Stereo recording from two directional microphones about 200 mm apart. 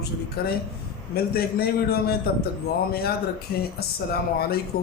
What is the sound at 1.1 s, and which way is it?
Speech, 50° left (ahead or behind).